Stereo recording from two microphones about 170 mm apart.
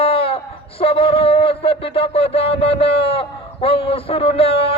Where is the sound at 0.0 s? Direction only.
35° left (ahead or behind).